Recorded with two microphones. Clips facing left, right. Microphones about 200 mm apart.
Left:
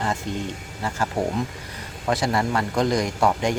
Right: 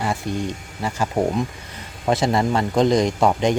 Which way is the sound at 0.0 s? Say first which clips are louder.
Right 3 dB; 10° right (ahead or behind).